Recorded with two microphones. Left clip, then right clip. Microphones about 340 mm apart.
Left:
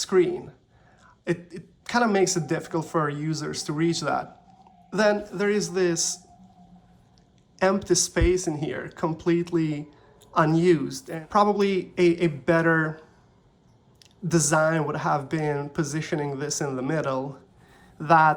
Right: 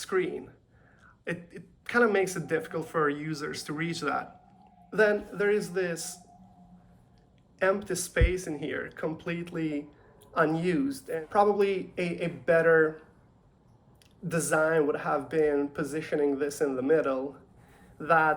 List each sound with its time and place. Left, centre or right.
0.0 s a man's voice: centre
7.6 s a man's voice: centre
14.3 s a man's voice: centre